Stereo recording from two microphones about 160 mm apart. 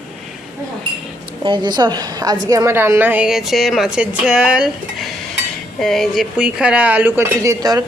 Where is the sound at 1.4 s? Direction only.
30° right (ahead or behind).